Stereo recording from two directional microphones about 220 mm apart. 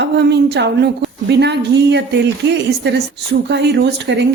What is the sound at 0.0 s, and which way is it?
A woman's voice, 50° right (ahead or behind).